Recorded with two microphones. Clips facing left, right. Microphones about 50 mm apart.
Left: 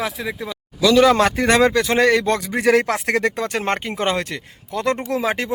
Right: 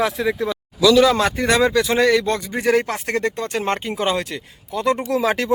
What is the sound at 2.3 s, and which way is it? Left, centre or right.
Speech, left.